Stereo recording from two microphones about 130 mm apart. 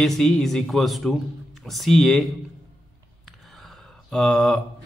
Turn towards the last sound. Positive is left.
turn(degrees=5)  # may be behind; listen again after turning